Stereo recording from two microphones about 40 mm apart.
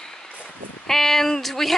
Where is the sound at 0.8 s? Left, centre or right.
Centre.